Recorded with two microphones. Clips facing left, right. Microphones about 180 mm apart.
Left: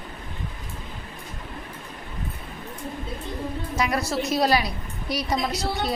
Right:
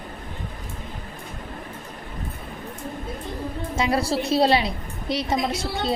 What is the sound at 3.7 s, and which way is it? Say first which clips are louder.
A woman's voice: right 3 dB; 30° right (ahead or behind).